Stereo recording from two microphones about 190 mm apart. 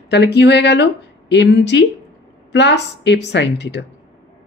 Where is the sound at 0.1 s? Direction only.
65° left (ahead or behind).